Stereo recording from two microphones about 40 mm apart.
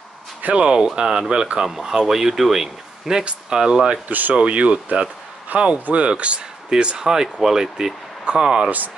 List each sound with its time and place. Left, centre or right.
0.4 s speech: right
0.7 s speech: right
1.7 s speech: centre
4.1 s speech: right
4.5 s speech: right
5.5 s speech: right
5.9 s speech: right
8.6 s speech: right